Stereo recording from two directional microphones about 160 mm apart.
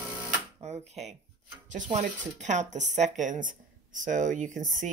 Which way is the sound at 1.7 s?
50° right (ahead or behind).